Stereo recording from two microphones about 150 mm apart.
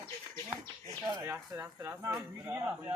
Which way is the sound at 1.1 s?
20° right (ahead or behind).